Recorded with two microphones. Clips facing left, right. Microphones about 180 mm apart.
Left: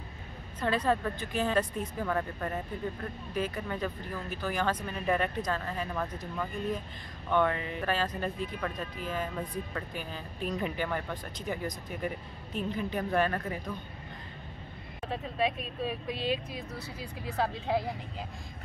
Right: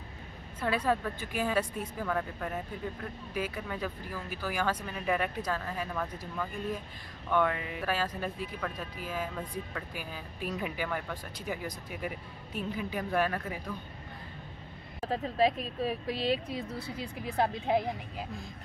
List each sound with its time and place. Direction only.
0.6 s speech: 10° right (ahead or behind)
15.0 s speech: 35° right (ahead or behind)
17.4 s speech: 20° right (ahead or behind)